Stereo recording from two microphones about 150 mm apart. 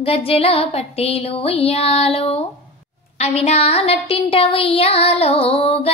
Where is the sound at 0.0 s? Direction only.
40° left (ahead or behind).